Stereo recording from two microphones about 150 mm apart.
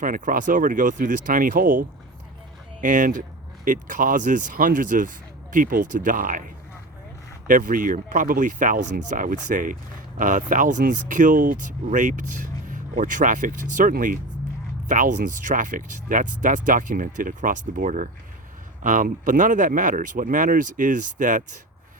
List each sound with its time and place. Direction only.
0.0 s speech: 65° right (ahead or behind)
2.8 s speech: 55° right (ahead or behind)